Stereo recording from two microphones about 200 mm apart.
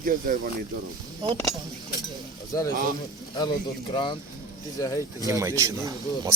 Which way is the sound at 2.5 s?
15° left (ahead or behind).